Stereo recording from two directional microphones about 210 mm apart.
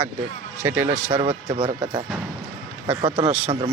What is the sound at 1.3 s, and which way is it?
Speech, 25° right (ahead or behind).